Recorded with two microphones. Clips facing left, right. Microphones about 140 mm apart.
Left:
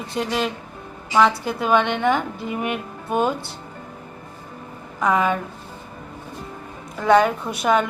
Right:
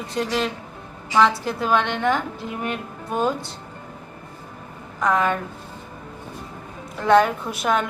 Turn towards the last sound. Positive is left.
turn(degrees=0)  # may be behind; listen again after turning